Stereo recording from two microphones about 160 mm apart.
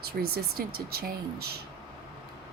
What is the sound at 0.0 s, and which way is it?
Speech, 75° right (ahead or behind).